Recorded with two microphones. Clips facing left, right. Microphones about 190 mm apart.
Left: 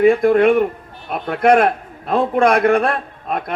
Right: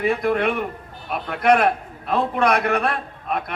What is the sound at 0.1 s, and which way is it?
A man's voice, 50° left (ahead or behind).